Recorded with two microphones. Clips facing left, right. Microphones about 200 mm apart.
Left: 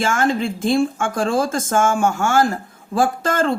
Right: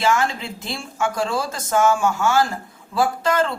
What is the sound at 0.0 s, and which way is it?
A woman's voice, 50° left (ahead or behind).